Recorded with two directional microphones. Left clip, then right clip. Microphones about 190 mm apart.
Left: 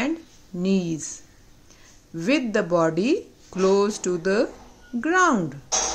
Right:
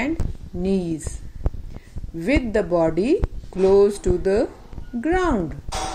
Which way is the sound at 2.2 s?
15° left (ahead or behind).